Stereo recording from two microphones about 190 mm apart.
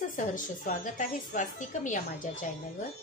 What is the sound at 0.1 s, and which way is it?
A woman's voice, 45° left (ahead or behind).